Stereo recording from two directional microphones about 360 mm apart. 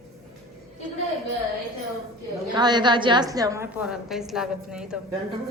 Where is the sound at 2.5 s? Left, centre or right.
Centre.